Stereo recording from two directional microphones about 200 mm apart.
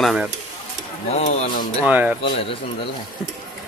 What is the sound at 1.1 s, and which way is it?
Speech, 35° left (ahead or behind).